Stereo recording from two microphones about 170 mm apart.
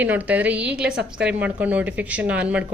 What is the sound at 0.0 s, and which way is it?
A woman's voice, 10° right (ahead or behind).